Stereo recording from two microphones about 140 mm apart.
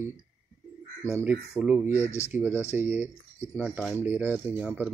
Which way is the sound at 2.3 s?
15° right (ahead or behind).